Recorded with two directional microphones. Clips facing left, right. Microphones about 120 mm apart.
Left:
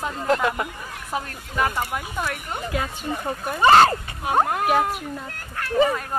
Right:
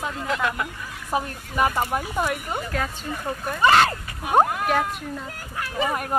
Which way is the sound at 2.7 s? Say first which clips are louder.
Left 1 dB; 10° left (ahead or behind).